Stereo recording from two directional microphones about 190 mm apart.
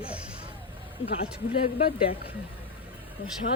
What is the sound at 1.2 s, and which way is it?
Speech, 30° left (ahead or behind).